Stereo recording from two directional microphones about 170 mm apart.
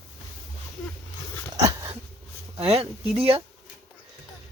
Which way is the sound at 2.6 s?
35° right (ahead or behind).